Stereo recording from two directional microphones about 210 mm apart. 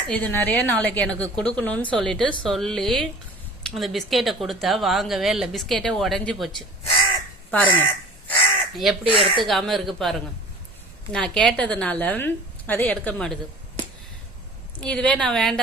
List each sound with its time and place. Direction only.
0.1 s a woman's voice: 10° left (ahead or behind)
8.3 s crow: centre (ahead or behind)
9.1 s speech: 25° right (ahead or behind)
9.4 s speech: centre (ahead or behind)
14.8 s speech: 5° left (ahead or behind)